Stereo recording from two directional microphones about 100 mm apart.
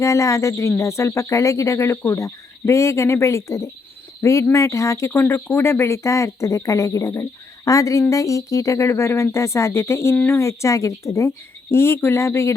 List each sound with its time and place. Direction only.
0.0 s speech: 30° left (ahead or behind)